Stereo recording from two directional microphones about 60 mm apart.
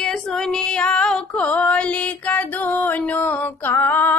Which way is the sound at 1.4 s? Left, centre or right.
Left.